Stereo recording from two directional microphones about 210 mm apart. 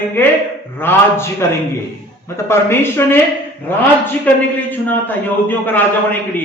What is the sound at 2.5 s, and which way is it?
Speech, 10° left (ahead or behind).